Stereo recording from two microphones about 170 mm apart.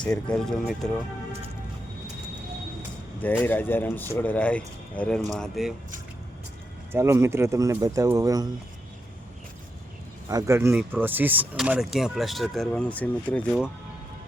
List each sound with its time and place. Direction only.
0.0 s speech: 5° left (ahead or behind)
3.4 s speech: 10° left (ahead or behind)
6.9 s speech: 15° right (ahead or behind)
10.2 s speech: 20° right (ahead or behind); by 13.6 s 10° left (ahead or behind)